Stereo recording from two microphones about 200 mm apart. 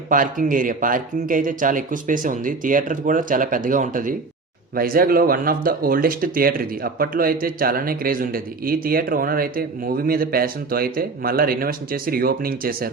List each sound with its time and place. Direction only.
0.1 s speech: 40° right (ahead or behind)